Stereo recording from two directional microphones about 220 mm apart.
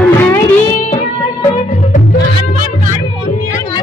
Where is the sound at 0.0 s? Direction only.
10° left (ahead or behind).